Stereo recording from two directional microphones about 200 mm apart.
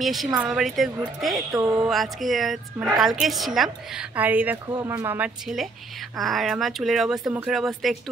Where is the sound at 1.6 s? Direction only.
15° right (ahead or behind).